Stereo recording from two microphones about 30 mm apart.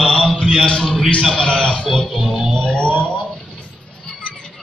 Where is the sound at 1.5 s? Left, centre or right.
Left.